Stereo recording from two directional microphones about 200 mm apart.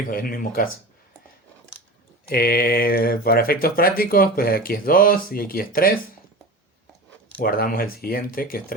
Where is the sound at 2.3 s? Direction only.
50° left (ahead or behind).